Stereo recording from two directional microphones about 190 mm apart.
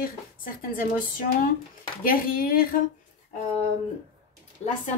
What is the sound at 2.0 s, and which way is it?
Speech, 50° left (ahead or behind).